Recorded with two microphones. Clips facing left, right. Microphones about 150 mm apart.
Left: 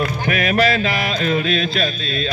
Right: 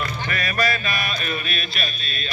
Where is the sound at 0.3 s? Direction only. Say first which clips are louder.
Left 8 dB; 75° left (ahead or behind); by 1.7 s 90° left.